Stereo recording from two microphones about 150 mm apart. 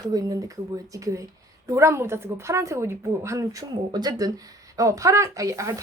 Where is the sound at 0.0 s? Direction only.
25° right (ahead or behind).